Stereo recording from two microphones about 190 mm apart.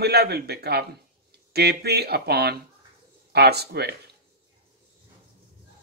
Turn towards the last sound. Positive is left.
turn(degrees=-60)  # may be behind; listen again after turning